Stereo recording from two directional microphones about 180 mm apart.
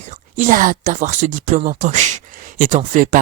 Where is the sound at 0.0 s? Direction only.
45° right (ahead or behind).